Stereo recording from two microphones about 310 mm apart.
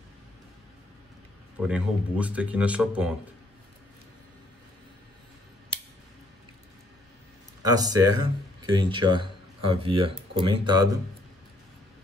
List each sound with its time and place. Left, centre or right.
1.6 s speech: centre
7.6 s speech: centre